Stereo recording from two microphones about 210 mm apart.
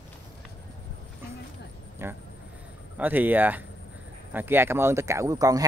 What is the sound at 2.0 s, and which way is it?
Speech, 10° right (ahead or behind).